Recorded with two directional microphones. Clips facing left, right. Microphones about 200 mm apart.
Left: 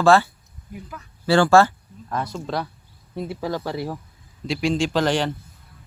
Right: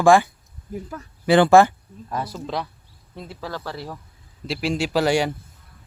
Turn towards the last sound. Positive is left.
turn(degrees=-10)  # may be behind; listen again after turning